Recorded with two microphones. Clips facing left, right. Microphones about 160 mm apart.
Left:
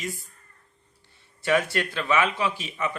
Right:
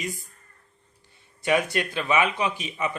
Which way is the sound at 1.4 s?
15° right (ahead or behind).